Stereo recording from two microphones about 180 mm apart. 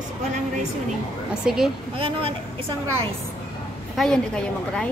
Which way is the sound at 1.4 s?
5° right (ahead or behind).